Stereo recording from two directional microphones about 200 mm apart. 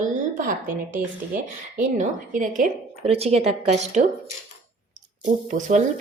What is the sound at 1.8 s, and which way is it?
A woman's voice, 40° right (ahead or behind).